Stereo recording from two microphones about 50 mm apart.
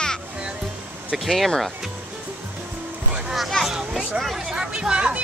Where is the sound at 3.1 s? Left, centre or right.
Centre.